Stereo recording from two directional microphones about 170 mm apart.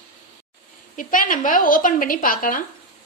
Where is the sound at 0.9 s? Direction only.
50° left (ahead or behind).